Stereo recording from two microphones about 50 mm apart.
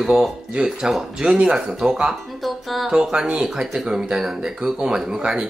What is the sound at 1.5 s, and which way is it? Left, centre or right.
A woman's voice, centre.